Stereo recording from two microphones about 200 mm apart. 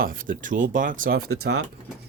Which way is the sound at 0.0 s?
45° right (ahead or behind).